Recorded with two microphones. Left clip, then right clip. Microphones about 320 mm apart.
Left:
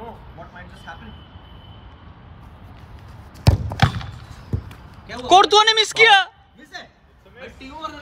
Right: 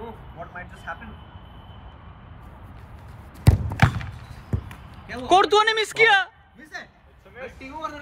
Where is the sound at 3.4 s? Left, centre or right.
Centre.